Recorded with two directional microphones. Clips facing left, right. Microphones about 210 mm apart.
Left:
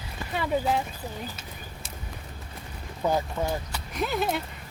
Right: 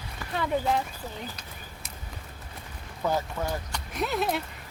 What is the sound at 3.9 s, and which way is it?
Speech, centre (ahead or behind).